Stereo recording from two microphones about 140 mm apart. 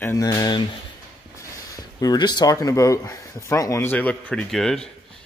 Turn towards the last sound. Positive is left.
turn(degrees=5)  # may be behind; listen again after turning